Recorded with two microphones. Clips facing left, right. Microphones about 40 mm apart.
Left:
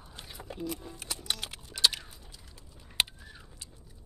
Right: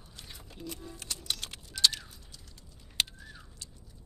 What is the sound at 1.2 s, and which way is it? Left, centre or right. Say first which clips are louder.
Clip-clop: left 2 dB; centre.